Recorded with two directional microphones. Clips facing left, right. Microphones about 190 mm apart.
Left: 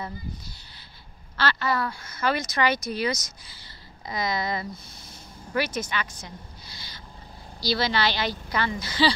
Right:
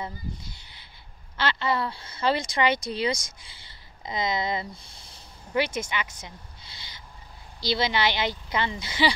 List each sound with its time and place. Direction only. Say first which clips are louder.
1.3 s speech: even; 20° right (ahead or behind)
7.6 s speech: even; 20° right (ahead or behind)